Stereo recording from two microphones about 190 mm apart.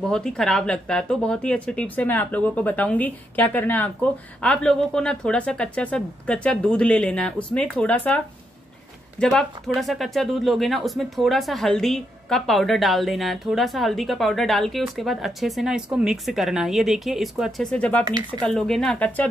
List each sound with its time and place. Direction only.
0.0 s speech: 5° left (ahead or behind)
9.2 s speech: 5° left (ahead or behind)
18.0 s speech: 20° right (ahead or behind)
18.4 s speech: 5° left (ahead or behind)